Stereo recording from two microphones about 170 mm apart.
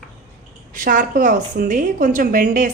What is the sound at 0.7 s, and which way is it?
A woman's voice, 55° right (ahead or behind).